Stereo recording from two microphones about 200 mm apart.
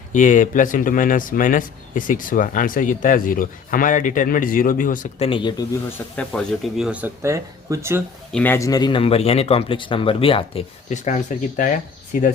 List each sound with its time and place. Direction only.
0.1 s speech: 40° left (ahead or behind)
5.2 s speech: 25° left (ahead or behind)
6.1 s speech: centre (ahead or behind)
8.3 s speech: 5° left (ahead or behind); by 12.3 s 40° left (ahead or behind)